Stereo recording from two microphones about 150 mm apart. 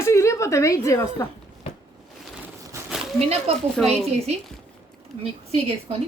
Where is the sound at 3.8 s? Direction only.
45° right (ahead or behind).